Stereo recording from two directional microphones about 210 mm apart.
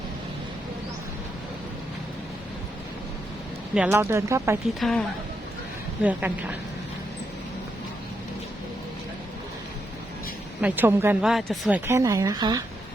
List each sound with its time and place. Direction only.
3.8 s speech: 10° right (ahead or behind)
4.8 s a woman's voice: centre (ahead or behind)
10.6 s speech: 10° right (ahead or behind)
11.9 s speech: 15° right (ahead or behind)